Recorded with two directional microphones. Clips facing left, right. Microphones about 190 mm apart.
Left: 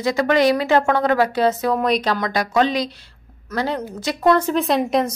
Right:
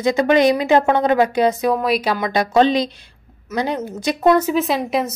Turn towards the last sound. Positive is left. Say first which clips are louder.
# left 2 dB
turn(degrees=-5)  # may be behind; listen again after turning